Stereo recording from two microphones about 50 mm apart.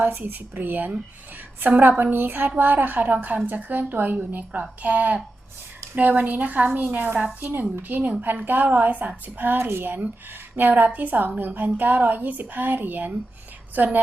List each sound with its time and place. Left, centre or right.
0.0 s a woman's voice: right